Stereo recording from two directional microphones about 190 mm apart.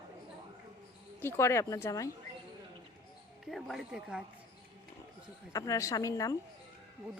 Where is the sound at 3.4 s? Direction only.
Centre (ahead or behind).